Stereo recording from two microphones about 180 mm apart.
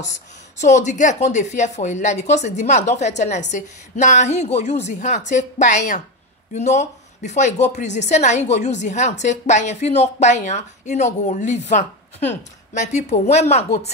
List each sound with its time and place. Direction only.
0.6 s speech: 40° left (ahead or behind)